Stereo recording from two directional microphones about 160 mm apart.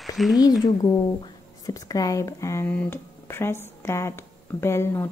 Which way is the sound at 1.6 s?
20° left (ahead or behind).